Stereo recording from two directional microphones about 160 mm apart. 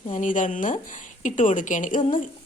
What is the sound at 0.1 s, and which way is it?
A woman's voice, 55° left (ahead or behind).